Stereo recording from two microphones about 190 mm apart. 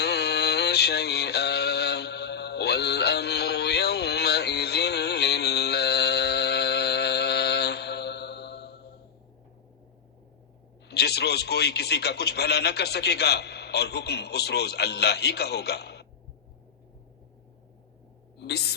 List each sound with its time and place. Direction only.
0.0 s mantra: 60° left (ahead or behind)
10.8 s a man's voice: 60° left (ahead or behind)
18.3 s a sound: 60° left (ahead or behind)